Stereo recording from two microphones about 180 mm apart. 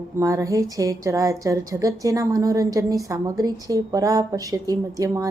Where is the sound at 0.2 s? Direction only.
15° right (ahead or behind).